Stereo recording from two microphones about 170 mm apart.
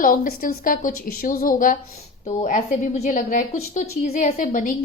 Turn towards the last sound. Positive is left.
turn(degrees=50)  # may be behind; listen again after turning